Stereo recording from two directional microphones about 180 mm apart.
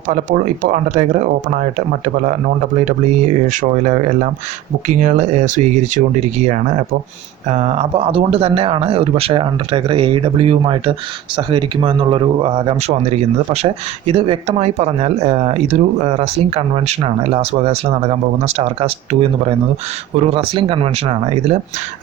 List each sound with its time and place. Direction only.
0.1 s speech: 45° right (ahead or behind)
2.7 s speech: 40° right (ahead or behind)
20.1 s speech: 30° right (ahead or behind)